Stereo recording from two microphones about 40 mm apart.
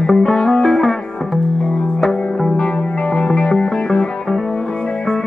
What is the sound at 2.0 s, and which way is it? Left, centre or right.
Music, centre.